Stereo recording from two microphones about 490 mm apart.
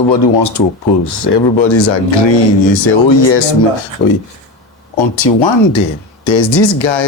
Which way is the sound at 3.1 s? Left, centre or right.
Left.